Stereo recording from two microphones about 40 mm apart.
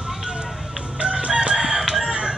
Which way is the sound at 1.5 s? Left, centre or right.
Centre.